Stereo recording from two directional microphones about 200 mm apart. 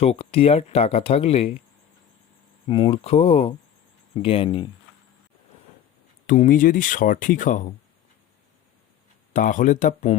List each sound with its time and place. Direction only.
0.0 s speech: 30° left (ahead or behind)
2.6 s speech: 25° left (ahead or behind)
6.2 s speech: 40° left (ahead or behind)
9.3 s speech: 40° left (ahead or behind)